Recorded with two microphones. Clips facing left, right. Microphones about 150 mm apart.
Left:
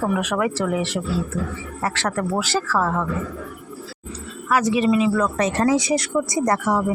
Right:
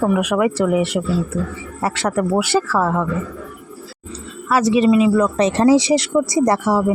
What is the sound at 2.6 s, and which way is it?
Speech, 25° right (ahead or behind).